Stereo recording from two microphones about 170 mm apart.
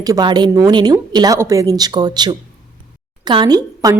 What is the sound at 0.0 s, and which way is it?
A woman's voice, 25° right (ahead or behind).